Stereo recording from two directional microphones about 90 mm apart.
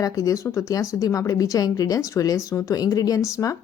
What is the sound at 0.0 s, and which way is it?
Speech, 40° left (ahead or behind).